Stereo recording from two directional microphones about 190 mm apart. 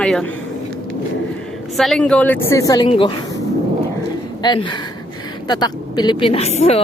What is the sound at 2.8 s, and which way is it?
Speech, 30° left (ahead or behind).